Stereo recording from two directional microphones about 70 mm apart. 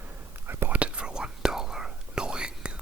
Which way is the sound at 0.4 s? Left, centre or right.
Right.